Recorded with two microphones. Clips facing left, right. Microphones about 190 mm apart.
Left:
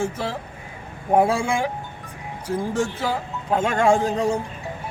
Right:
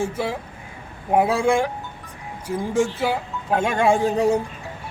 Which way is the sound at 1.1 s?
5° right (ahead or behind).